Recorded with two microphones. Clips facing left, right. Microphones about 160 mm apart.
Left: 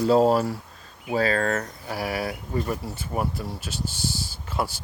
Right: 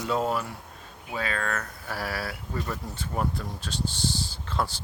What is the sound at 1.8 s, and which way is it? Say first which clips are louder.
Speech: left 3 dB; 15° left (ahead or behind).